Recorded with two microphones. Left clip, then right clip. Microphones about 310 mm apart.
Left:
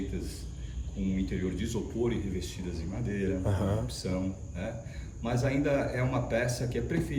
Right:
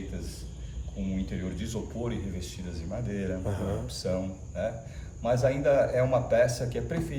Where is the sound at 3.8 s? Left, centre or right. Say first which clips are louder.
Right 3 dB; centre.